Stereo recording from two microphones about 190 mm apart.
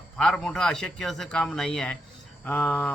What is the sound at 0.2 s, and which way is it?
A man's voice, 5° left (ahead or behind).